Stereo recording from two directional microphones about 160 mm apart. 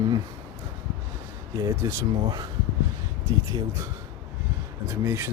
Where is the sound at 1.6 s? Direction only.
20° right (ahead or behind).